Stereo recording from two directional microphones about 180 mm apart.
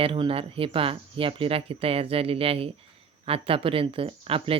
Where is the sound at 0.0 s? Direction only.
30° right (ahead or behind).